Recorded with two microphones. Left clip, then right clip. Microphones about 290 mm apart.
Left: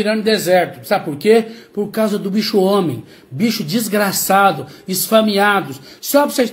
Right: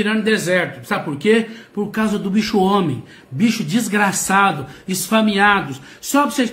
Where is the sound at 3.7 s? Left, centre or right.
Centre.